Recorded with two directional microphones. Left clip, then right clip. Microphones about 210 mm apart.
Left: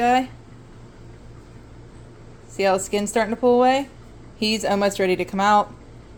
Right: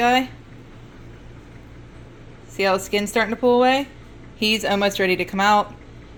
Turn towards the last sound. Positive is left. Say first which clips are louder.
# even
turn(degrees=5)  # may be behind; listen again after turning